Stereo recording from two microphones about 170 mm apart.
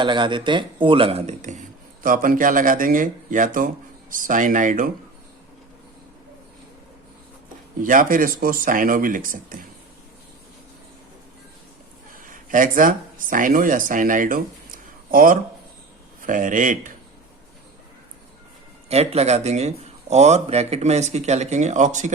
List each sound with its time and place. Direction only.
0.0 s speech: 25° right (ahead or behind); by 1.6 s 45° right (ahead or behind)
2.0 s speech: 55° right (ahead or behind)
7.8 s speech: 55° right (ahead or behind)
12.3 s speech: 50° right (ahead or behind)
18.9 s speech: 40° right (ahead or behind)